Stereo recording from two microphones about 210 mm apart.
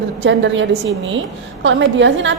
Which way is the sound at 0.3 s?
60° right (ahead or behind).